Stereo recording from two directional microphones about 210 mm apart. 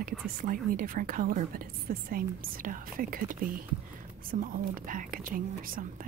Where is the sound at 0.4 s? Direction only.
40° right (ahead or behind).